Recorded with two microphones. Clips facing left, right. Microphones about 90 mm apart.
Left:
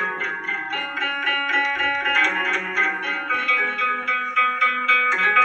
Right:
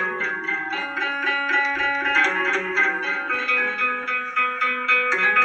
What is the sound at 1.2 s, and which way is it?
Music, 20° right (ahead or behind).